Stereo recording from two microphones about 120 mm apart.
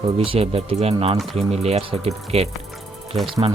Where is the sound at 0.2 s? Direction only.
50° right (ahead or behind).